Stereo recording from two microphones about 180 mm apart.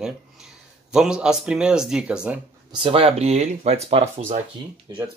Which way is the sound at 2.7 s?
30° right (ahead or behind).